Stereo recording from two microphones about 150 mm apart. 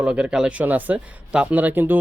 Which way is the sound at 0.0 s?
5° right (ahead or behind).